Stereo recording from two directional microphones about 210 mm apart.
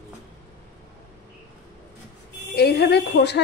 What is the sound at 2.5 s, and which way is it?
Speech, 50° left (ahead or behind).